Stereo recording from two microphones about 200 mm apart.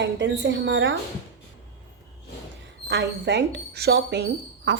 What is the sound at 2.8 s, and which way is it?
Speech, 55° right (ahead or behind).